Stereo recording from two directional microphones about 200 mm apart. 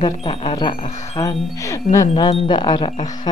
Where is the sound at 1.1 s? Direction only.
15° left (ahead or behind).